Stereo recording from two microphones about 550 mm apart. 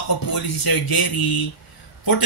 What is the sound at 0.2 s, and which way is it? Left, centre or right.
A man's voice, left.